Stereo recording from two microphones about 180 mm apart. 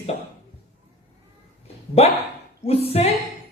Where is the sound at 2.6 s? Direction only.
35° left (ahead or behind).